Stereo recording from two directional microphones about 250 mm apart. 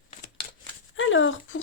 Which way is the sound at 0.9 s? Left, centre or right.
Left.